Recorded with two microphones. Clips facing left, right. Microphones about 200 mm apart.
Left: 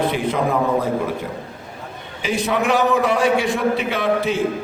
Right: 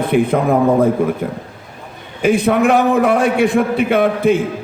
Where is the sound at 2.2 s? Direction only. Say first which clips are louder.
Right 7 dB; 55° right (ahead or behind).